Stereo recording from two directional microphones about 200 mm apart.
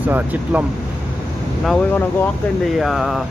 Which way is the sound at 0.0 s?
5° right (ahead or behind).